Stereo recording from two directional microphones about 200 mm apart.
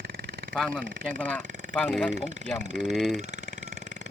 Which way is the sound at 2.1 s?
35° right (ahead or behind).